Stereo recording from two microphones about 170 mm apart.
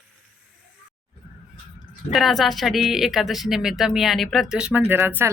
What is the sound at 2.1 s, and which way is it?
A woman's voice, centre (ahead or behind).